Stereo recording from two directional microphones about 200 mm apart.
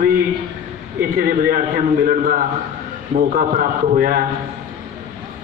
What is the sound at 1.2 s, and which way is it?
A man's voice, 45° right (ahead or behind).